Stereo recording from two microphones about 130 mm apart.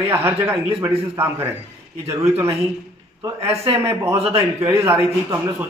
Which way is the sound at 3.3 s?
50° right (ahead or behind).